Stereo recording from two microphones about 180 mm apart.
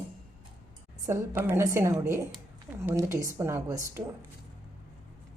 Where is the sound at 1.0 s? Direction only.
15° right (ahead or behind).